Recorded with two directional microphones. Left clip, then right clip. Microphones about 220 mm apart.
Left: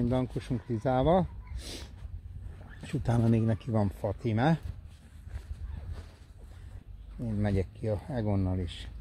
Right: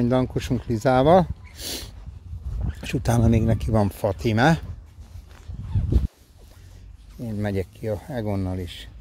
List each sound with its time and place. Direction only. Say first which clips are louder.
0.0 s speech: right 9 dB; 35° right (ahead or behind)
7.2 s speech: right 5 dB; 35° right (ahead or behind)